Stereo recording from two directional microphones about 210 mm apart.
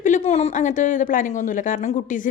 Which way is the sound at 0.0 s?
35° left (ahead or behind).